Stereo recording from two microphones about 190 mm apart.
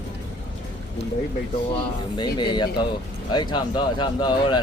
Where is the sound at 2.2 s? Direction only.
25° left (ahead or behind).